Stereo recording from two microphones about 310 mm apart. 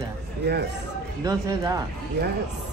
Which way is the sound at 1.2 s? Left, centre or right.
Centre.